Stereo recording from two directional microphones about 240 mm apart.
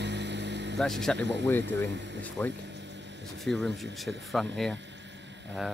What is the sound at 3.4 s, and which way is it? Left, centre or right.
Speech, centre.